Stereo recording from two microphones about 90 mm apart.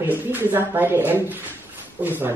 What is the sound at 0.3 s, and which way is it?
A woman's voice, 20° right (ahead or behind).